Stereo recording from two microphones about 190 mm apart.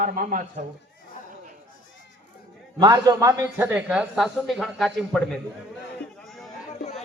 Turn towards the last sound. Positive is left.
turn(degrees=0)  # may be behind; listen again after turning